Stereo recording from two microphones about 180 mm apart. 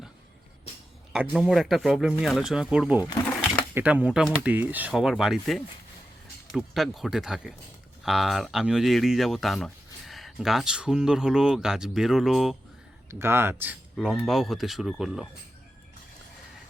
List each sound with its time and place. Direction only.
1.1 s speech: 5° right (ahead or behind)
3.0 s a sound: 20° left (ahead or behind)
3.8 s speech: 10° right (ahead or behind)
13.1 s speech: 15° right (ahead or behind)